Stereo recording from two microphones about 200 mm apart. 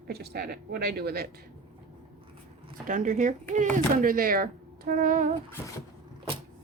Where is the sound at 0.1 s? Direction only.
50° right (ahead or behind).